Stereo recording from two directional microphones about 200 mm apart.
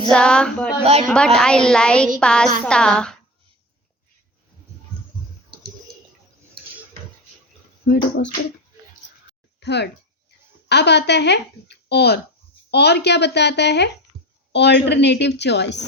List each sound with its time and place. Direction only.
0.1 s a woman's voice: 5° left (ahead or behind)
7.9 s speech: 50° left (ahead or behind)
9.6 s speech: 55° left (ahead or behind)